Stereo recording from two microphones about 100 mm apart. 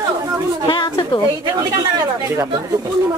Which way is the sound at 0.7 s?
50° left (ahead or behind).